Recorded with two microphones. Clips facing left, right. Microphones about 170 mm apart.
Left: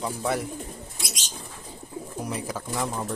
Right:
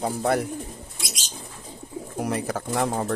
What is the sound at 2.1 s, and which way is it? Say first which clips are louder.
Speech: right 6 dB; 65° right (ahead or behind).